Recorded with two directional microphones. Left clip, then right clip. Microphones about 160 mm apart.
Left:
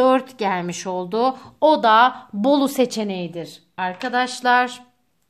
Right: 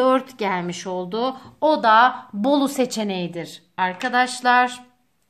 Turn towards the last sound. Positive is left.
turn(degrees=20)  # may be behind; listen again after turning